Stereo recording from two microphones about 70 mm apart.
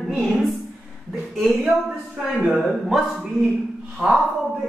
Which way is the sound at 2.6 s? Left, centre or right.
Centre.